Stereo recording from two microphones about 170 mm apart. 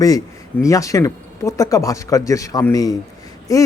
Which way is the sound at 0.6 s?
20° left (ahead or behind).